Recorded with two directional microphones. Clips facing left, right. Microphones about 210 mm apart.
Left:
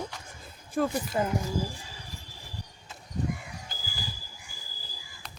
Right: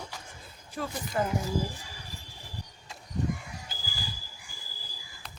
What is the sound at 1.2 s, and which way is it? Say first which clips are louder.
Speech: even; 15° left (ahead or behind).